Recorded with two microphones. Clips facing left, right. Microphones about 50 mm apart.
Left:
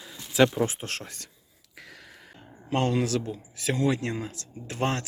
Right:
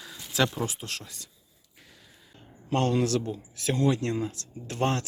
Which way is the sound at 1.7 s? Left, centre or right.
Left.